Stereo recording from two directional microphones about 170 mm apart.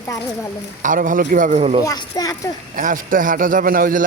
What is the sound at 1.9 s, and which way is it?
Speech, 20° left (ahead or behind).